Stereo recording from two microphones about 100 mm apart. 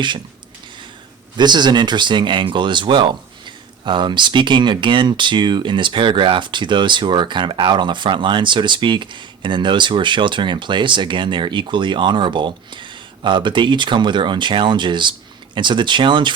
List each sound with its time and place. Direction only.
1.4 s speech: 45° right (ahead or behind)